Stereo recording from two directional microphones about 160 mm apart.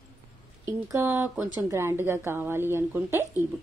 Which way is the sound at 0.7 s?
20° right (ahead or behind).